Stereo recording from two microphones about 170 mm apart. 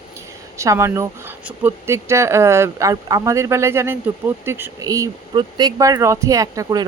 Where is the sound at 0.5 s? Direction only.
15° right (ahead or behind).